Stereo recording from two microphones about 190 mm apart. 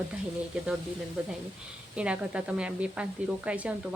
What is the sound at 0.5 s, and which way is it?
A woman's voice, 5° right (ahead or behind).